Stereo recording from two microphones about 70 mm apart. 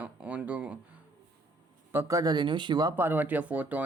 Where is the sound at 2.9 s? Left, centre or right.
Right.